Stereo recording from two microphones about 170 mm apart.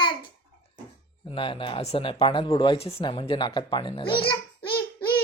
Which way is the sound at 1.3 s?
30° left (ahead or behind).